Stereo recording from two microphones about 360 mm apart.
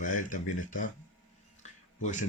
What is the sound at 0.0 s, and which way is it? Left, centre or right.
Speech, left.